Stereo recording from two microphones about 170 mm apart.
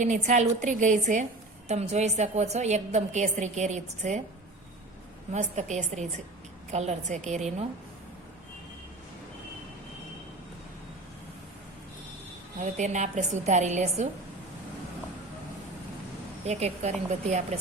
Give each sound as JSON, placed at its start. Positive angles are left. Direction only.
{"t": 0.0, "sound": "a woman's voice", "side_deg": -45}
{"t": 5.3, "sound": "a woman's voice", "side_deg": -45}
{"t": 12.5, "sound": "a woman's voice", "side_deg": -45}
{"t": 16.5, "sound": "a woman's voice", "side_deg": -40}